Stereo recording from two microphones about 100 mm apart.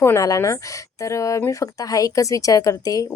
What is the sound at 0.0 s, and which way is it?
Speech, 30° left (ahead or behind).